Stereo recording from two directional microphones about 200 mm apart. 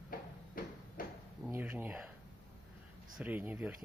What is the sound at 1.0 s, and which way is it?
Drawer open or close, 45° left (ahead or behind).